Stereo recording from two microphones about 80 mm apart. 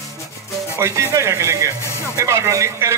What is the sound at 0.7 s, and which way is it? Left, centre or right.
Speech, right.